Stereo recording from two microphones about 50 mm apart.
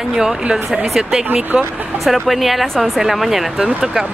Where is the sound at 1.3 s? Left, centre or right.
Right.